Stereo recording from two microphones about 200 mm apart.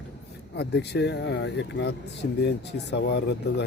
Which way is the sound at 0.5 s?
60° left (ahead or behind).